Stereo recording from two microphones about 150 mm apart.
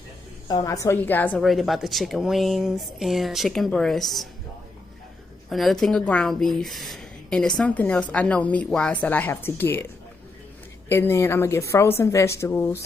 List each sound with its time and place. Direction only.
0.5 s a woman's voice: 25° left (ahead or behind)
1.4 s speech: centre (ahead or behind)
5.5 s a woman's voice: centre (ahead or behind)
10.9 s a woman's voice: 15° left (ahead or behind)